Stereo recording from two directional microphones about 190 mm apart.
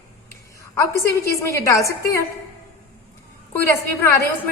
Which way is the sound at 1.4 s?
15° left (ahead or behind).